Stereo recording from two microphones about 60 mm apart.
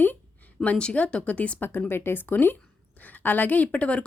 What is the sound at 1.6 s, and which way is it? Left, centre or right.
Speech, left.